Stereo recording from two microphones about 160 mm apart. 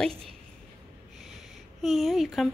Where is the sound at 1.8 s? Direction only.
Centre (ahead or behind).